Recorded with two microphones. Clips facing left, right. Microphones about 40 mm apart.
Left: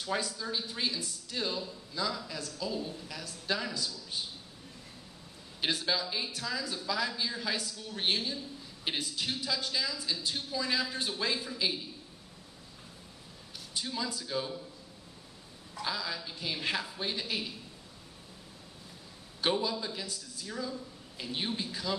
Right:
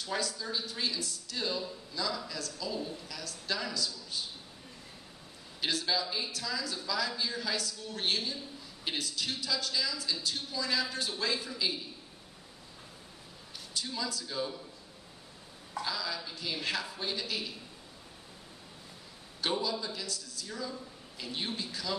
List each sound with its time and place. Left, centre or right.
0.0 s speech: centre
5.6 s speech: left
13.7 s speech: centre
15.8 s speech: centre
19.7 s speech: centre
20.4 s speech: centre